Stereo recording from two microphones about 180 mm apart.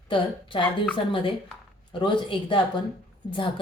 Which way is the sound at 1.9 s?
25° left (ahead or behind).